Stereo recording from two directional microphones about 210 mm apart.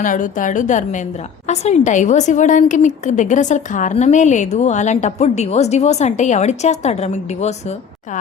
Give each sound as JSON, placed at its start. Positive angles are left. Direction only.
{"t": 0.0, "sound": "a woman's voice", "side_deg": 40}